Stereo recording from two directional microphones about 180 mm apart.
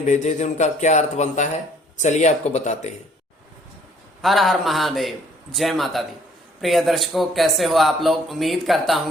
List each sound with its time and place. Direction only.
0.0 s a man's voice: 40° left (ahead or behind)
4.2 s speech: centre (ahead or behind)